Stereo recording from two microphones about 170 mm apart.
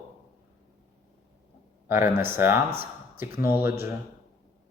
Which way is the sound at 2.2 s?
15° right (ahead or behind).